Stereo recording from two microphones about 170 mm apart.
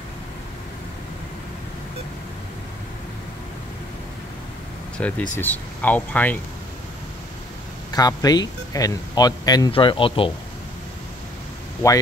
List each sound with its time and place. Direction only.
4.9 s speech: 10° left (ahead or behind)
7.9 s speech: 20° left (ahead or behind)